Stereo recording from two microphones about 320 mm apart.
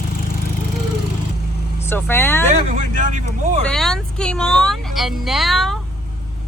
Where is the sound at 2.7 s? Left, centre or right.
Right.